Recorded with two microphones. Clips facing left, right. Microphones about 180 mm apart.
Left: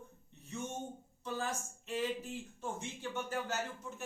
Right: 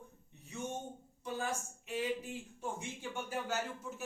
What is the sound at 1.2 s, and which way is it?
A woman's voice, 10° right (ahead or behind).